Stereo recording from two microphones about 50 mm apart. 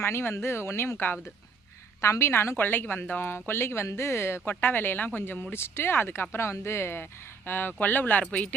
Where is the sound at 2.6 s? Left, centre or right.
Left.